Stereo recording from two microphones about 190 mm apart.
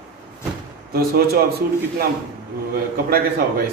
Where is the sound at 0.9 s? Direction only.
55° right (ahead or behind).